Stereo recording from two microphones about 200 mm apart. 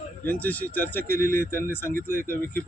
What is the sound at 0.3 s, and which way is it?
Speech, 10° left (ahead or behind).